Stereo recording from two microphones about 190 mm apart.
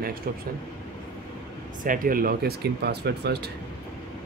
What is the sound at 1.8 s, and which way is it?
Speech, 45° right (ahead or behind).